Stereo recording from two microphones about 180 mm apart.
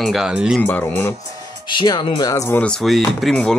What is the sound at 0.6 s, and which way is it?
Speech, 10° left (ahead or behind).